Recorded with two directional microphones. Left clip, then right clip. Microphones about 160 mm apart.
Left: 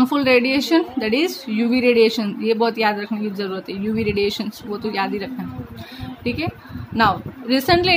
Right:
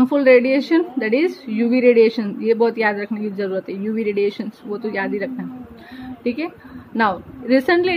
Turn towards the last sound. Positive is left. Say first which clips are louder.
# right 1 dB
turn(degrees=15)  # may be behind; listen again after turning